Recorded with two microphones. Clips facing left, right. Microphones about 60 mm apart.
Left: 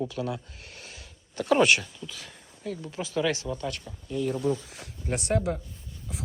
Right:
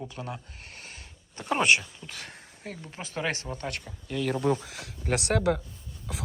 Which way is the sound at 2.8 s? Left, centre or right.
Right.